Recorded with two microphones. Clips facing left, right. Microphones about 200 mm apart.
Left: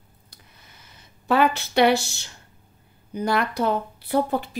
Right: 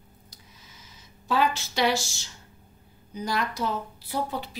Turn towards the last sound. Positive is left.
turn(degrees=50)  # may be behind; listen again after turning